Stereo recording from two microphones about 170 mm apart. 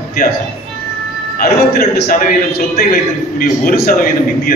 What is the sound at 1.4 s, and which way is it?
A man's voice, 65° left (ahead or behind).